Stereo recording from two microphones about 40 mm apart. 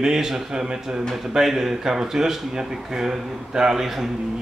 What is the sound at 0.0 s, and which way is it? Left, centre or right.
Speech, centre.